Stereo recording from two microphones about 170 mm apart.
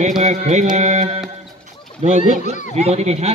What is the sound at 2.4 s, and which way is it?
Speech, 45° left (ahead or behind).